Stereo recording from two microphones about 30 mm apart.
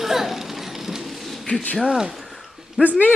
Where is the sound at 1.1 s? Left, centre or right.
Centre.